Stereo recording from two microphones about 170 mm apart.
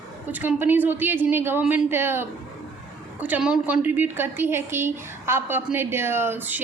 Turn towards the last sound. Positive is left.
turn(degrees=-10)  # may be behind; listen again after turning